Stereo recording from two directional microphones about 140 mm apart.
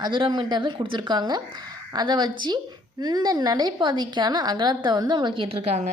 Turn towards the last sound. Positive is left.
turn(degrees=-45)  # may be behind; listen again after turning